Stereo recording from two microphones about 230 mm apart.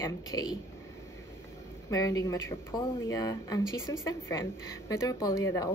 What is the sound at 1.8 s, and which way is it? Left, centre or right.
Speech, centre.